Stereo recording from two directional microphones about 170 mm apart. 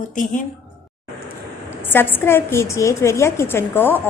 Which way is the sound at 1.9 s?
10° left (ahead or behind).